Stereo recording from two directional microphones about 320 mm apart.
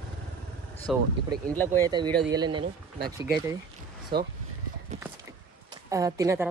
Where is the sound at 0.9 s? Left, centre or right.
Centre.